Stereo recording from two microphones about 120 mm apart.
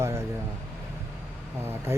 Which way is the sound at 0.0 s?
25° right (ahead or behind).